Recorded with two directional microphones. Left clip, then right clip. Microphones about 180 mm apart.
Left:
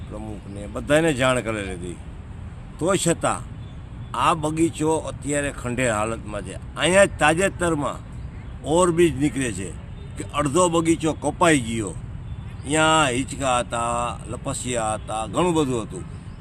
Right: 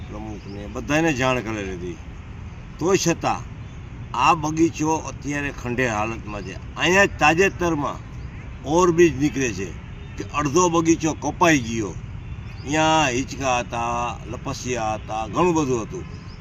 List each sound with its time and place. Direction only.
0.7 s speech: 25° left (ahead or behind)
2.8 s speech: 25° left (ahead or behind)
12.6 s speech: 25° left (ahead or behind)